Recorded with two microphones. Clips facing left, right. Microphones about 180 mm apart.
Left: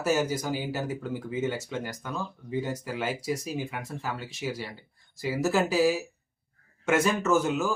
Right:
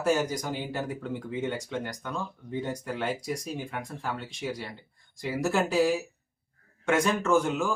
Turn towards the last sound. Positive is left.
turn(degrees=5)  # may be behind; listen again after turning